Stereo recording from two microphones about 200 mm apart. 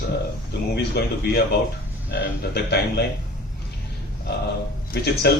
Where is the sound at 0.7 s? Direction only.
55° left (ahead or behind).